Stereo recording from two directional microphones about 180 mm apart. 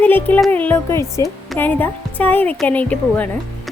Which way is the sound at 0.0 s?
10° left (ahead or behind).